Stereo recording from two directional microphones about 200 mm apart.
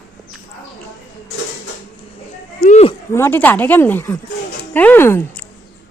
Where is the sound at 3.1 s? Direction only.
10° left (ahead or behind).